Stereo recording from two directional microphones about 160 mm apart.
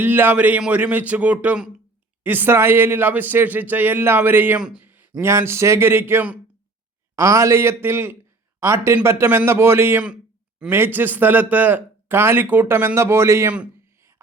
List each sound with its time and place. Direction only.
0.0 s speech: 15° right (ahead or behind)